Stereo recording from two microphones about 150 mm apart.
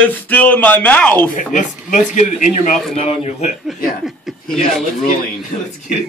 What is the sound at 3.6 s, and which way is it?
Speech, centre (ahead or behind).